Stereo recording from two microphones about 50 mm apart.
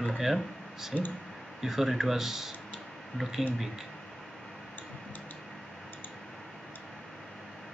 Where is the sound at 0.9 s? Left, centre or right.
Left.